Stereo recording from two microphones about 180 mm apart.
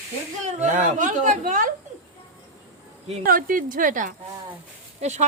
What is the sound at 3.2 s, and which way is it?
A woman's voice, 50° right (ahead or behind).